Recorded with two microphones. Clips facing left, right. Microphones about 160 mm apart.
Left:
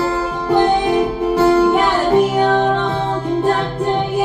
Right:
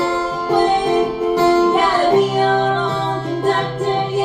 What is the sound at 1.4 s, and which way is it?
Music, 25° right (ahead or behind).